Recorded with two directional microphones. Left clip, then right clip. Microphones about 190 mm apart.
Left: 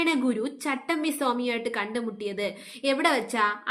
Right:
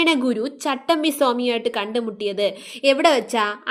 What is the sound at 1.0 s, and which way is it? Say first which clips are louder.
A woman's voice: right 7 dB; 30° right (ahead or behind).